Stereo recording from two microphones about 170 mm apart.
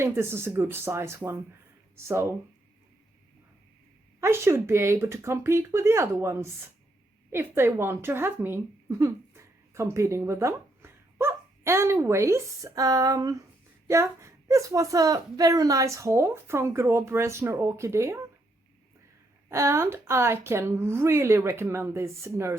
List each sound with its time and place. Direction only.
0.0 s a woman's voice: 15° right (ahead or behind)
4.2 s a woman's voice: 15° right (ahead or behind)
19.5 s a woman's voice: 15° right (ahead or behind)